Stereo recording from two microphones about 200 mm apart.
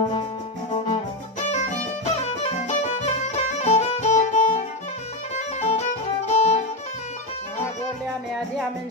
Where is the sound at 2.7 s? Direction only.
35° left (ahead or behind).